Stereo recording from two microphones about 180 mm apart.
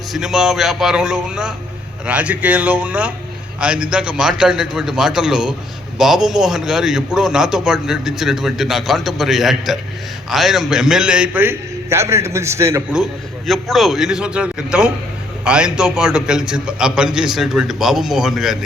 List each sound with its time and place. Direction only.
0.1 s a man's voice: centre (ahead or behind)
13.5 s a man's voice: centre (ahead or behind)